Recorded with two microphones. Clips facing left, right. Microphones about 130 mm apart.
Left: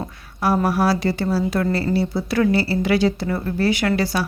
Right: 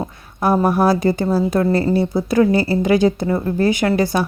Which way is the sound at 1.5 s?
25° right (ahead or behind).